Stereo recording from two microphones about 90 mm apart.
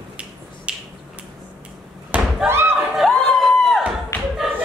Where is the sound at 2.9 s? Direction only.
Centre (ahead or behind).